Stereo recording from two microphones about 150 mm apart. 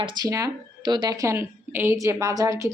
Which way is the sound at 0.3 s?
25° right (ahead or behind).